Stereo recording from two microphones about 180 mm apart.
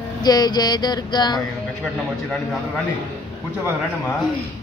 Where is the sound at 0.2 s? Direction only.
20° left (ahead or behind).